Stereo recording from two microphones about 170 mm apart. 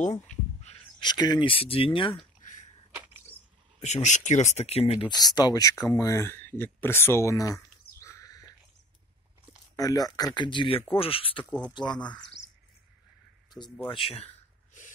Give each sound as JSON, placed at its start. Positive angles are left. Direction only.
{"t": 1.0, "sound": "speech", "side_deg": 25}
{"t": 2.4, "sound": "a sound", "side_deg": 45}
{"t": 3.8, "sound": "speech", "side_deg": 45}
{"t": 9.8, "sound": "speech", "side_deg": 20}
{"t": 13.5, "sound": "speech", "side_deg": 25}